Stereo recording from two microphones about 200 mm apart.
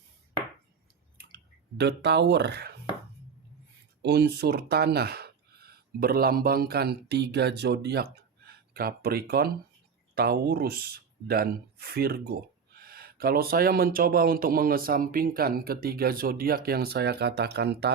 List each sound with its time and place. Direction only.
1.8 s speech: 55° right (ahead or behind)
4.0 s speech: 55° right (ahead or behind)